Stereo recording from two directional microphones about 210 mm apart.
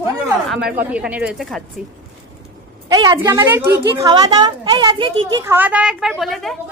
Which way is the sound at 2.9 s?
20° right (ahead or behind).